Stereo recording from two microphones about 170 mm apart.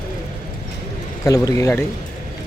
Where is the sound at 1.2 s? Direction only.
20° left (ahead or behind).